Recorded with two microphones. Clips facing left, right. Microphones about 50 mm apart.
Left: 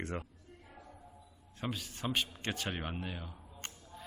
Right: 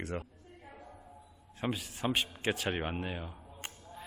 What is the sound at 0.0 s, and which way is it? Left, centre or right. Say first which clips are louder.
Speech: right 1 dB; centre.